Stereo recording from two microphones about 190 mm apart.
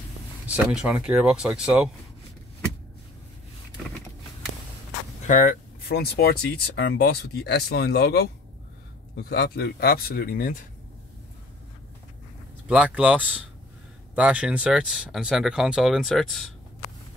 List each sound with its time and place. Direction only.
0.5 s speech: 5° right (ahead or behind)
5.2 s speech: 45° left (ahead or behind)
12.6 s speech: 5° right (ahead or behind)